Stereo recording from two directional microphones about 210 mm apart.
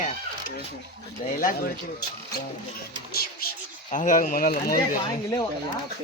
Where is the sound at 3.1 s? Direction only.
45° left (ahead or behind).